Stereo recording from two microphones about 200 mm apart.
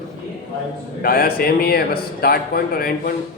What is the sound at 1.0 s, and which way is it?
Speech, 50° left (ahead or behind).